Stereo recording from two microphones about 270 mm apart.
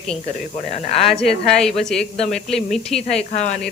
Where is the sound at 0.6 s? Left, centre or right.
Left.